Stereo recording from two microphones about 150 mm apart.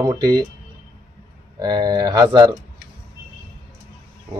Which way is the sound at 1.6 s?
30° right (ahead or behind).